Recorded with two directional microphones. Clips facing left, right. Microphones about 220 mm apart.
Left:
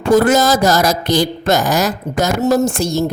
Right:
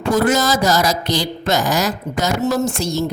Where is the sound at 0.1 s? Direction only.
50° left (ahead or behind).